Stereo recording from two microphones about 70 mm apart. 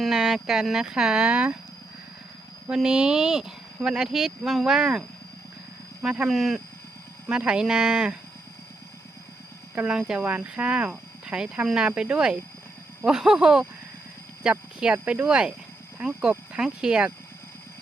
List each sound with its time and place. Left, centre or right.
0.0 s speech: centre
2.6 s speech: centre
6.3 s speech: centre
7.3 s speech: centre
9.7 s speech: centre